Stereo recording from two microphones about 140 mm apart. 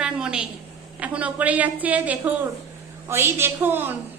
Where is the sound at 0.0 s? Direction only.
5° right (ahead or behind).